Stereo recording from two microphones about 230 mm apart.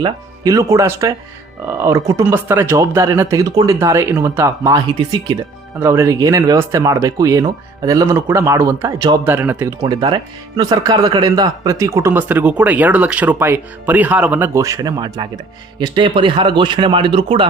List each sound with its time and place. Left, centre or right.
0.0 s speech: centre
5.8 s speech: centre